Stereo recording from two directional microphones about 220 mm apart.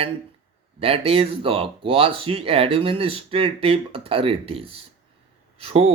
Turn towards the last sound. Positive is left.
turn(degrees=-30)  # may be behind; listen again after turning